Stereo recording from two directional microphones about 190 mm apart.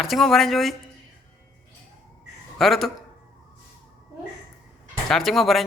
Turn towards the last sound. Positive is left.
turn(degrees=0)  # may be behind; listen again after turning